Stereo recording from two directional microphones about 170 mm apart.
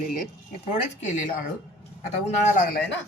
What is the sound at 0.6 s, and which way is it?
Speech, 45° left (ahead or behind).